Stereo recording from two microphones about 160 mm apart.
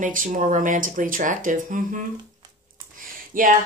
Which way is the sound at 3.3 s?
60° right (ahead or behind).